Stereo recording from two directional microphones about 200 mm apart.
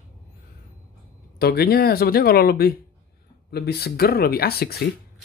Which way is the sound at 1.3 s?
50° left (ahead or behind).